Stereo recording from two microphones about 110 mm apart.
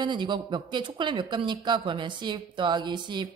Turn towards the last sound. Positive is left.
turn(degrees=-45)  # may be behind; listen again after turning